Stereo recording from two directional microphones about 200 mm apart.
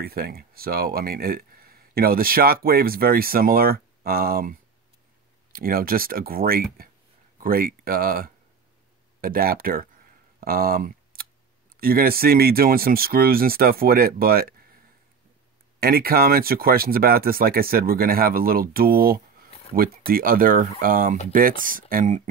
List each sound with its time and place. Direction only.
0.0 s speech: 50° right (ahead or behind)
10.4 s a sound: 50° right (ahead or behind)
11.7 s speech: 45° right (ahead or behind)
15.8 s speech: 50° right (ahead or behind)